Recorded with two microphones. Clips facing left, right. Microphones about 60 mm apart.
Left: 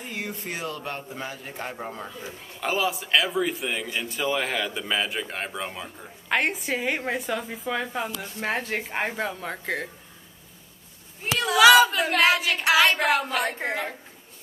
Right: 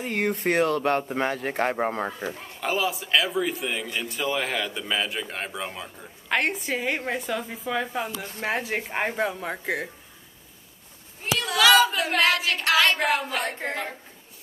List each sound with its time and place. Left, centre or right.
0.0 s speech: right
2.6 s a man's voice: centre
11.3 s a man's voice: centre